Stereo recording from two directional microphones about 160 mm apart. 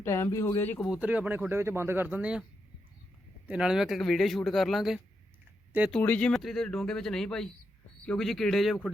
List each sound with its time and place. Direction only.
0.0 s speech: 15° left (ahead or behind)
0.9 s speech: 10° right (ahead or behind)
3.4 s speech: 5° right (ahead or behind)
6.0 s speech: 10° left (ahead or behind)